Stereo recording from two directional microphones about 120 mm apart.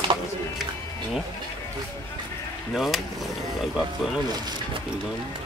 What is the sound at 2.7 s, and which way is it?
Speech, centre (ahead or behind).